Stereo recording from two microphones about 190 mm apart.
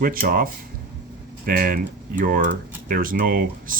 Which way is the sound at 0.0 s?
50° right (ahead or behind).